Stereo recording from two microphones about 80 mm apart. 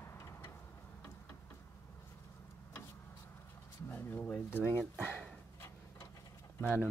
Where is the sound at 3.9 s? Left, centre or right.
Left.